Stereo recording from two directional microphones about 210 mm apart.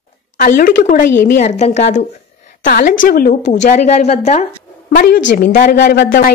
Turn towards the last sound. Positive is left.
turn(degrees=40)  # may be behind; listen again after turning